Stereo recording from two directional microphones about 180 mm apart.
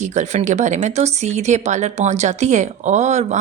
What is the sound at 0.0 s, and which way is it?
Speech, 40° right (ahead or behind).